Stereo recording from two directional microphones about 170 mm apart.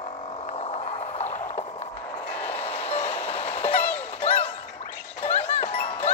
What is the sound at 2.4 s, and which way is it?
Music, 10° left (ahead or behind).